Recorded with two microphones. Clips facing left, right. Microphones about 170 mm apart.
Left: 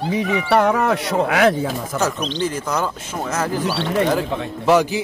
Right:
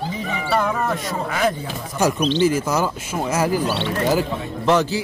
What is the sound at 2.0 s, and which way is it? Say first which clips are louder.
Speech: right 6 dB; 15° right (ahead or behind).